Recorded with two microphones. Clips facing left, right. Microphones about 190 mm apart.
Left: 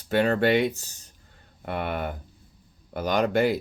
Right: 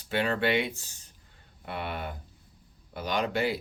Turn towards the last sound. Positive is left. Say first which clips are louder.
# left 6 dB
turn(degrees=45)  # may be behind; listen again after turning